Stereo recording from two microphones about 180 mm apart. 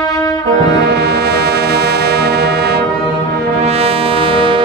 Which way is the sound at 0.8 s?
65° right (ahead or behind).